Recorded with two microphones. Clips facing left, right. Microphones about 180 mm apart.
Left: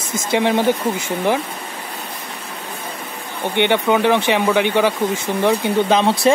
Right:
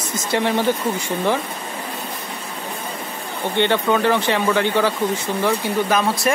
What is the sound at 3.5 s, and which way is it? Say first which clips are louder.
Speech: left 2 dB; 15° left (ahead or behind).